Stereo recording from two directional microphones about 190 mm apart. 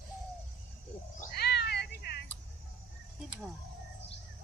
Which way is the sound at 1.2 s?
55° left (ahead or behind).